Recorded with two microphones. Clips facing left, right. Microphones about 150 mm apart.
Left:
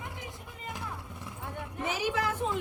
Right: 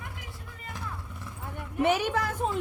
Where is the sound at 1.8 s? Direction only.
65° right (ahead or behind).